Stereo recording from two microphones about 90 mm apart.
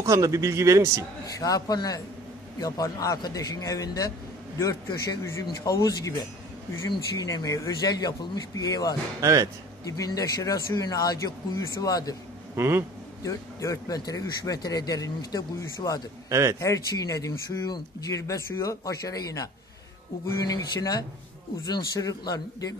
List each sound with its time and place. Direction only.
0.0 s a man's voice: 35° right (ahead or behind)
1.4 s speech: 45° left (ahead or behind)
9.2 s a man's voice: 35° right (ahead or behind)
9.8 s speech: 40° left (ahead or behind)
12.5 s speech: 30° right (ahead or behind)
13.2 s speech: 35° left (ahead or behind)
16.3 s speech: 35° right (ahead or behind)
16.5 s speech: 35° left (ahead or behind)